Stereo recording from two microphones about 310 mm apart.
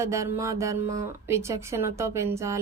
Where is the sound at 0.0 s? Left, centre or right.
Centre.